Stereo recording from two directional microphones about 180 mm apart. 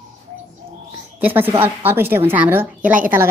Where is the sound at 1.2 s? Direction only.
10° right (ahead or behind).